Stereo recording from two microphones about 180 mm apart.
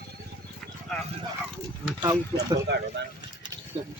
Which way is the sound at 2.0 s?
20° right (ahead or behind).